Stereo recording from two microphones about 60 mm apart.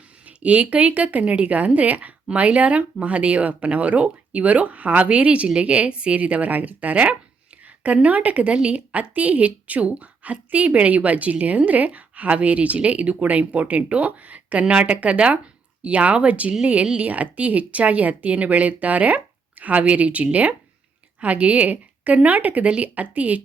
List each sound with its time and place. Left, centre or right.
0.3 s speech: right